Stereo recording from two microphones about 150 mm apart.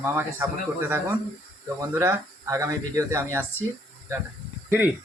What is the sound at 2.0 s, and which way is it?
Speech, 20° right (ahead or behind).